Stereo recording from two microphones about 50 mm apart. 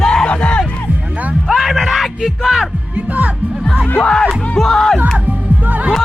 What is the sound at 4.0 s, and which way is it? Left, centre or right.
Speech, centre.